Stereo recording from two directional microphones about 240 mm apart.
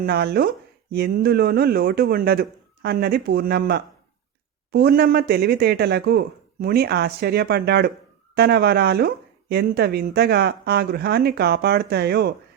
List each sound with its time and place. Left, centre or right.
0.0 s speech: right